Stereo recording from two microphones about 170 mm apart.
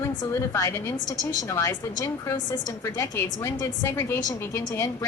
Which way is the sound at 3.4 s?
15° left (ahead or behind).